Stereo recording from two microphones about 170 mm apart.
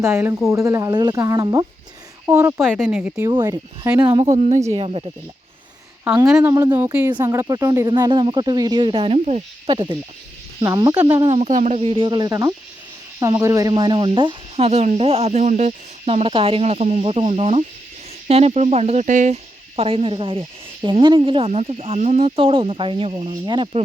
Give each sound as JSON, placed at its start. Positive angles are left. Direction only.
{"t": 0.0, "sound": "speech", "side_deg": -15}
{"t": 3.2, "sound": "speech", "side_deg": -25}
{"t": 6.5, "sound": "speech", "side_deg": -20}
{"t": 9.6, "sound": "speech", "side_deg": -25}
{"t": 11.3, "sound": "speech", "side_deg": -40}